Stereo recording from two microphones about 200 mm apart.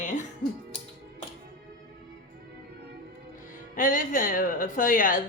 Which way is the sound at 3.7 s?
40° left (ahead or behind).